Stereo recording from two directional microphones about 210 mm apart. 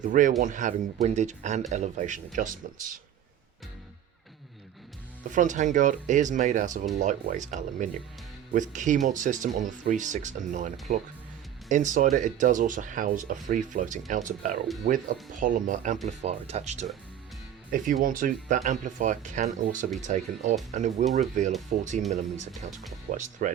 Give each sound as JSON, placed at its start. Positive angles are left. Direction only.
{"t": 0.0, "sound": "speech", "side_deg": -40}
{"t": 5.3, "sound": "speech", "side_deg": -35}
{"t": 22.7, "sound": "speech", "side_deg": 0}
{"t": 23.1, "sound": "speech", "side_deg": -35}